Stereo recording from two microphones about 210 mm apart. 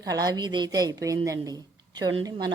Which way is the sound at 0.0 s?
15° right (ahead or behind).